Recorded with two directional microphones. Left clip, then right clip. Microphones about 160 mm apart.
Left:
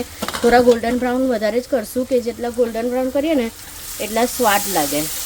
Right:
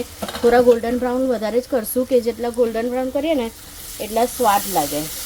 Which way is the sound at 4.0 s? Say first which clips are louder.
Left 1 dB; 10° left (ahead or behind).